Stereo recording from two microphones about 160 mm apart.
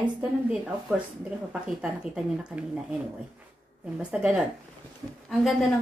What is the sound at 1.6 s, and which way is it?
A woman's voice, 5° right (ahead or behind).